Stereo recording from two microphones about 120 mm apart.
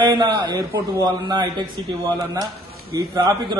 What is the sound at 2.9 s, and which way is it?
Speech, 35° right (ahead or behind).